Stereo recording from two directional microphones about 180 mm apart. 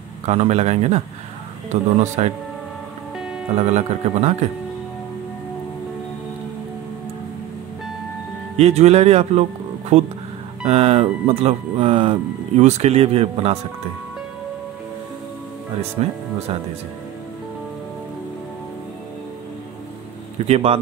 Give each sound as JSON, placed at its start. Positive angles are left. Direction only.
{"t": 0.2, "sound": "speech", "side_deg": -40}
{"t": 3.5, "sound": "speech", "side_deg": -35}
{"t": 8.5, "sound": "speech", "side_deg": -35}
{"t": 16.0, "sound": "speech", "side_deg": -35}
{"t": 20.4, "sound": "speech", "side_deg": -35}